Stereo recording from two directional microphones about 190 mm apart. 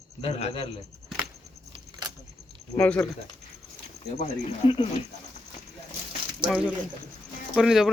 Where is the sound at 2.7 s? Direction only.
10° left (ahead or behind).